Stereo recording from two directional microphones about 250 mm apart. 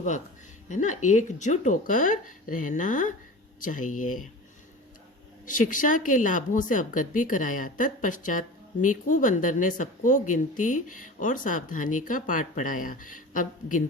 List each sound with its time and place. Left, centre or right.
0.7 s a woman's voice: left
5.5 s a woman's voice: left